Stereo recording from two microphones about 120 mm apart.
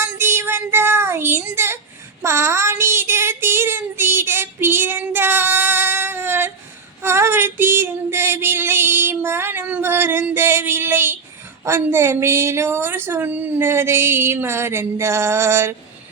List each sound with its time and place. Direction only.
0.0 s child singing: 20° right (ahead or behind)
7.0 s a sound: 20° right (ahead or behind)
11.6 s a woman's voice: 20° right (ahead or behind)